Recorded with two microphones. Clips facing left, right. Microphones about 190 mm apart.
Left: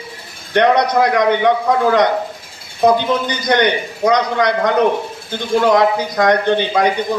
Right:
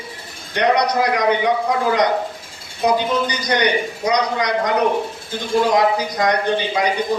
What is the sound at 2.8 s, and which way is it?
A man's voice, 55° left (ahead or behind).